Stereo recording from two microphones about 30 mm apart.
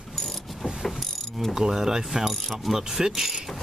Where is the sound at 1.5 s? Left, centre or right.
Centre.